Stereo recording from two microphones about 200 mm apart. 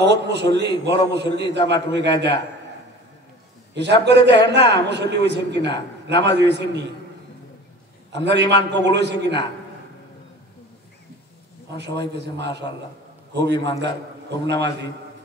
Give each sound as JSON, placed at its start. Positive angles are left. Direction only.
{"t": 0.0, "sound": "a man's voice", "side_deg": -60}
{"t": 3.7, "sound": "a man's voice", "side_deg": -60}
{"t": 8.1, "sound": "a man's voice", "side_deg": -60}
{"t": 12.4, "sound": "a man's voice", "side_deg": -60}